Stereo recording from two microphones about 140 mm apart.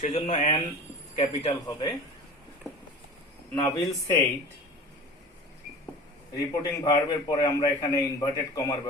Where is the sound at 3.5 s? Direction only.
20° left (ahead or behind).